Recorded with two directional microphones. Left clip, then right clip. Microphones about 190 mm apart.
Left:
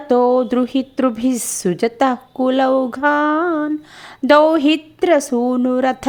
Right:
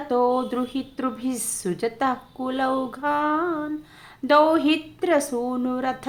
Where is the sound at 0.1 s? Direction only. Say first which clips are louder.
Left 8 dB; 40° left (ahead or behind).